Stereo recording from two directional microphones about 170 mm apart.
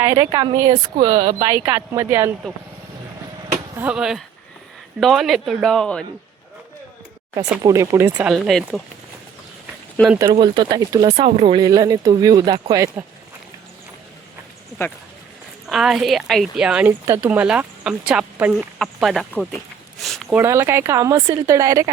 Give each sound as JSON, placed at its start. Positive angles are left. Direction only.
{"t": 0.0, "sound": "speech", "side_deg": -15}
{"t": 1.1, "sound": "speech", "side_deg": -45}
{"t": 1.4, "sound": "speech", "side_deg": -15}
{"t": 3.8, "sound": "a woman's voice", "side_deg": -5}
{"t": 7.6, "sound": "speech", "side_deg": -20}
{"t": 8.3, "sound": "a woman's voice", "side_deg": 0}
{"t": 10.2, "sound": "speech", "side_deg": -25}
{"t": 15.7, "sound": "a woman's voice", "side_deg": 0}
{"t": 20.0, "sound": "a sound", "side_deg": 0}
{"t": 20.3, "sound": "speech", "side_deg": -15}